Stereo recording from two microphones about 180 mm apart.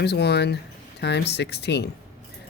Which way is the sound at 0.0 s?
65° left (ahead or behind).